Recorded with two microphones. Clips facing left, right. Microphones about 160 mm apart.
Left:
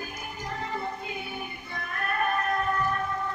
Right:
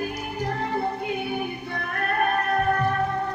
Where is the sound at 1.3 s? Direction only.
60° right (ahead or behind).